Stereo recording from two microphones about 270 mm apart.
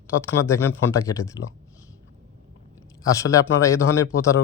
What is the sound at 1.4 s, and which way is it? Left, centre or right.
Speech, left.